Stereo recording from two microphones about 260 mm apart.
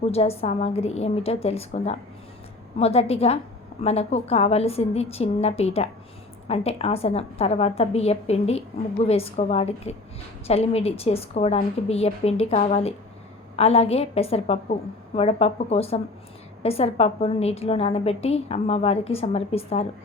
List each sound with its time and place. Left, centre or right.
0.0 s a woman's voice: left